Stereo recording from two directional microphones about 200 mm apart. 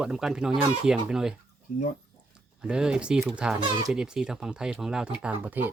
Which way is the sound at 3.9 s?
5° right (ahead or behind).